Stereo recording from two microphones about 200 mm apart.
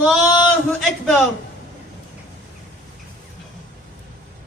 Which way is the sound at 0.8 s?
Centre (ahead or behind).